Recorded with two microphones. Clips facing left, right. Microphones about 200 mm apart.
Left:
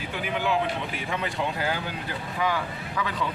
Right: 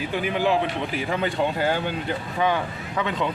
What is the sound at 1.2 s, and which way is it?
Speech, 30° right (ahead or behind).